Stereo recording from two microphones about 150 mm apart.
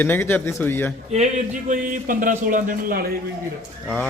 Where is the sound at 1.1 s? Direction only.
55° right (ahead or behind); by 3.1 s 75° right (ahead or behind).